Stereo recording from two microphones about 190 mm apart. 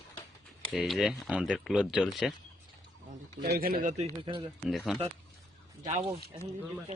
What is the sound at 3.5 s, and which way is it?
Speech, 50° right (ahead or behind).